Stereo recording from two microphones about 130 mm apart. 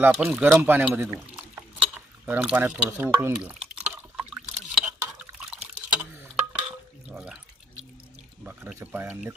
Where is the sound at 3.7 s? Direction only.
5° right (ahead or behind).